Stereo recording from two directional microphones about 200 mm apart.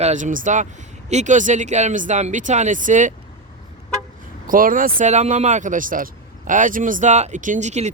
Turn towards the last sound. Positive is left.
turn(degrees=-35)  # may be behind; listen again after turning